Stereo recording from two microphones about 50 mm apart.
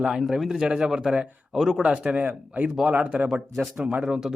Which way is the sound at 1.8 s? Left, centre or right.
Centre.